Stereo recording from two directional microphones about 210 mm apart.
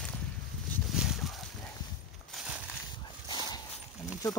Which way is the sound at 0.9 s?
Centre (ahead or behind).